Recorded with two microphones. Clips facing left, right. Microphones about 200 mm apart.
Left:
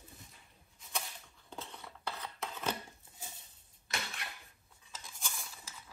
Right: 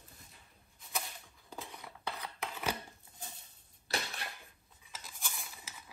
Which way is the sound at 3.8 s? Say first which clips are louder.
Right 4 dB; 35° right (ahead or behind).